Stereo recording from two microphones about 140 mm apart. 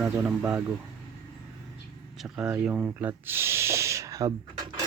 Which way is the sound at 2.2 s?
10° right (ahead or behind).